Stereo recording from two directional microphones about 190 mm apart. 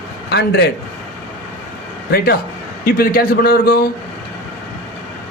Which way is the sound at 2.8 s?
50° left (ahead or behind).